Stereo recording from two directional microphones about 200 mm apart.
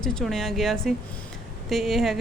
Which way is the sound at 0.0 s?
5° left (ahead or behind).